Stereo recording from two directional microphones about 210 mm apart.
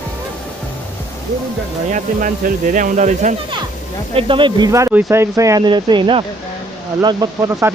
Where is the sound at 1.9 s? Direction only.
40° right (ahead or behind).